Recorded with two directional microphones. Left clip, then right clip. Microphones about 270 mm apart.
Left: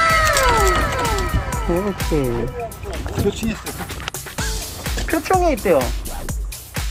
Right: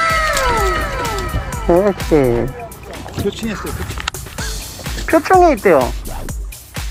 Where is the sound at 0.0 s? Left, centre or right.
Centre.